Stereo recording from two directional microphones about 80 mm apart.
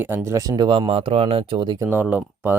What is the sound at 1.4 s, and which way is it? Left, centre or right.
Speech, right.